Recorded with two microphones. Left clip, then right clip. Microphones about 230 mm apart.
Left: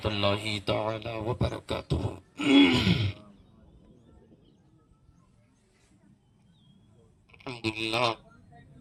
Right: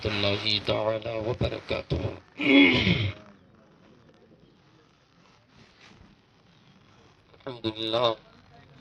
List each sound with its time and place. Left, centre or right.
0.0 s speech: centre
0.6 s speech: left
7.4 s speech: left